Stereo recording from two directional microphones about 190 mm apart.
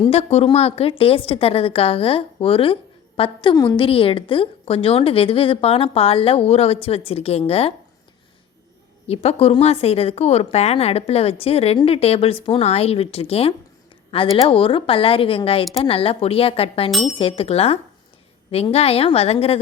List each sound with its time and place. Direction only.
0.1 s a woman's voice: 35° left (ahead or behind)
9.0 s a woman's voice: 30° left (ahead or behind)